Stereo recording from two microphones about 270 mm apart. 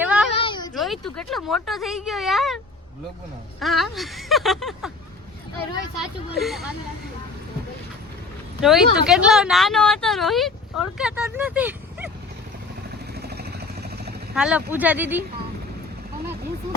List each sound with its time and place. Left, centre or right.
0.0 s a sound: centre
0.3 s a sound: centre
0.7 s speech: centre
3.6 s speech: centre
6.0 s speech: centre
8.6 s speech: centre
13.1 s vehicle: right
14.3 s speech: centre